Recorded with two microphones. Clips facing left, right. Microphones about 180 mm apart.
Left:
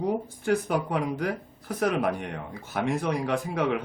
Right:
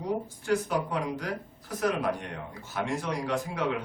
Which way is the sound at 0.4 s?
55° left (ahead or behind).